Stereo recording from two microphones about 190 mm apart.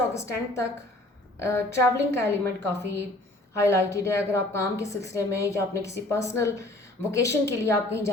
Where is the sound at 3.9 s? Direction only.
15° left (ahead or behind).